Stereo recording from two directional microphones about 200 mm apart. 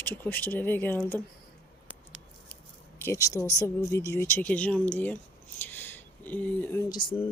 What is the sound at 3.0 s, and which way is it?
Speech, 15° left (ahead or behind).